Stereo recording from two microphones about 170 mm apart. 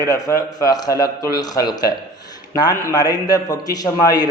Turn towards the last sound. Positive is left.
turn(degrees=20)  # may be behind; listen again after turning